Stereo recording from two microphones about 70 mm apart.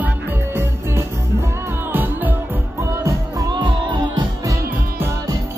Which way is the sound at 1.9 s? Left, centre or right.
Right.